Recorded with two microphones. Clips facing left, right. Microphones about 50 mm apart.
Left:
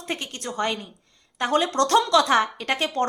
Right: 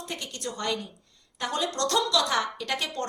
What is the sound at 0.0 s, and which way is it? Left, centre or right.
A woman's voice, left.